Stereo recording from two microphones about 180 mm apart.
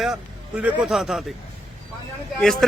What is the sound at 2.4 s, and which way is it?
Speech, centre (ahead or behind).